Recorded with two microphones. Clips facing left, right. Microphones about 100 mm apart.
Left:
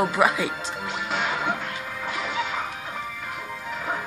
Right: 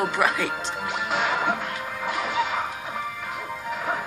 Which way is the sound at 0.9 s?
5° right (ahead or behind).